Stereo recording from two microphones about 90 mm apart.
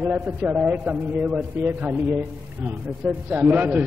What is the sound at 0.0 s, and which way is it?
A man's voice, 20° right (ahead or behind).